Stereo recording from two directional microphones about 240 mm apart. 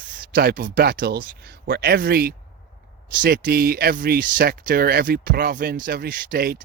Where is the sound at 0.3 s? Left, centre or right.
Right.